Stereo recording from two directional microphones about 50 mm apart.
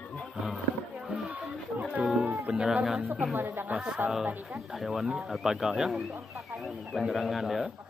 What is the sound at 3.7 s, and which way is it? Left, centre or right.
Speech, right.